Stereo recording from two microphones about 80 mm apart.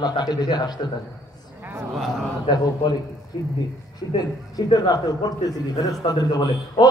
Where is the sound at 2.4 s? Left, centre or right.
Left.